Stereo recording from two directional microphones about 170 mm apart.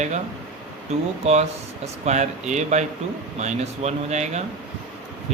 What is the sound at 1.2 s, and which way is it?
Speech, 40° right (ahead or behind).